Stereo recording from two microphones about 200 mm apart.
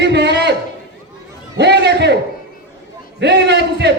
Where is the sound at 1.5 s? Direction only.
55° right (ahead or behind).